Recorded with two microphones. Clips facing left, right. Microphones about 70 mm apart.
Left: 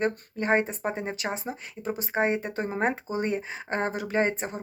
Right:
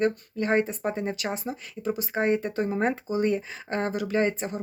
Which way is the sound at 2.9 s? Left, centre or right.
Left.